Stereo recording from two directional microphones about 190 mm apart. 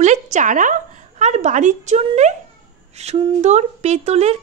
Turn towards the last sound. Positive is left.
turn(degrees=-35)  # may be behind; listen again after turning